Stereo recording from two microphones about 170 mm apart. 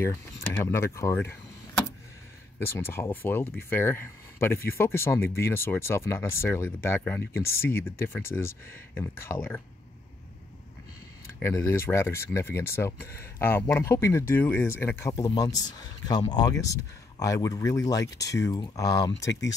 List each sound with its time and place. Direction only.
0.0 s speech: 15° left (ahead or behind)
2.6 s speech: 15° left (ahead or behind)
11.2 s speech: 15° left (ahead or behind)